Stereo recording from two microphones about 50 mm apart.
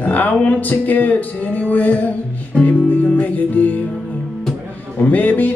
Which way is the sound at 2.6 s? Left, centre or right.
Left.